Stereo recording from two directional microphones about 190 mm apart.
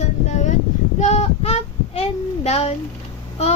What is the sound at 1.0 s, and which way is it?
Speech, 35° left (ahead or behind).